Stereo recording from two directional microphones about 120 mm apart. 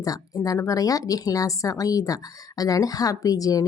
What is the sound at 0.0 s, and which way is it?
A woman's voice, 30° left (ahead or behind).